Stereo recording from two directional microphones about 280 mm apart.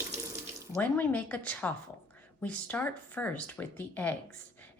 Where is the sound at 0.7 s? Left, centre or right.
Centre.